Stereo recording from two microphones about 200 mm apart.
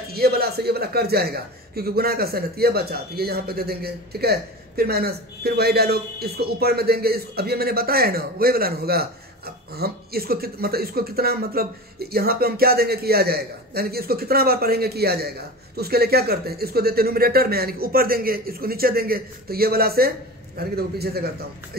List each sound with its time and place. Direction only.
0.1 s a man's voice: 50° right (ahead or behind)